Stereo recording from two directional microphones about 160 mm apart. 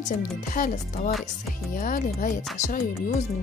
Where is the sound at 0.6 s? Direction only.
55° left (ahead or behind).